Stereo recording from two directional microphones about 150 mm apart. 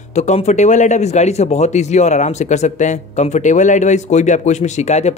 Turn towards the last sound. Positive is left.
turn(degrees=50)  # may be behind; listen again after turning